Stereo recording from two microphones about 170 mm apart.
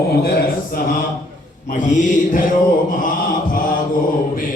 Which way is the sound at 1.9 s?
55° left (ahead or behind).